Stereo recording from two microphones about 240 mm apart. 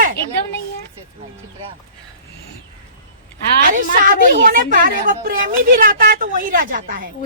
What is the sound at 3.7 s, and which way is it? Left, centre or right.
A woman's voice, right.